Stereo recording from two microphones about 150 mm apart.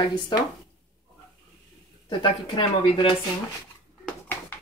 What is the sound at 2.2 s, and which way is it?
Speech, 35° left (ahead or behind).